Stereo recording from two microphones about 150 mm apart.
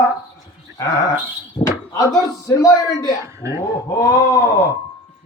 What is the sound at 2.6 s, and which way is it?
Speech, 25° left (ahead or behind).